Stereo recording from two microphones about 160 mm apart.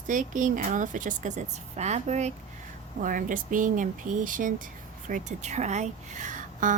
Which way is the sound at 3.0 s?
55° right (ahead or behind).